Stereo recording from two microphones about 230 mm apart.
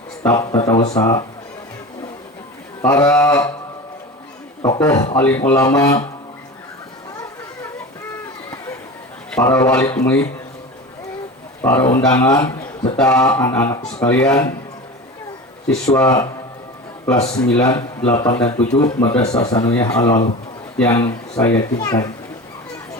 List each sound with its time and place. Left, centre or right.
0.2 s speech: centre
2.8 s speech: centre
4.6 s speech: centre
9.3 s speech: centre
11.6 s speech: centre
15.6 s a man's voice: centre
16.0 s a man's voice: centre
18.3 s speech: centre